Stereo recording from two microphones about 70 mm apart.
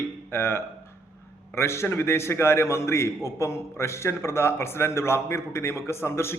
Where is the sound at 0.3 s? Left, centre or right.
Left.